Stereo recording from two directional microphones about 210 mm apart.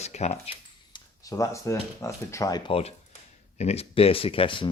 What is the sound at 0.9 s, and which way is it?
Speech, 15° left (ahead or behind).